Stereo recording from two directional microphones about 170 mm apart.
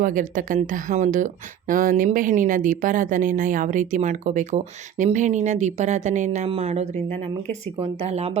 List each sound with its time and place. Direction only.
0.0 s speech: 50° right (ahead or behind)